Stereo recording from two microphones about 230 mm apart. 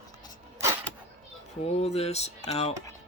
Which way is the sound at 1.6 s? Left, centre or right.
Left.